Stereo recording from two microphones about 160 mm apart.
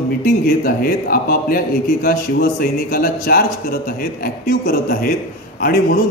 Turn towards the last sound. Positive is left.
turn(degrees=65)  # may be behind; listen again after turning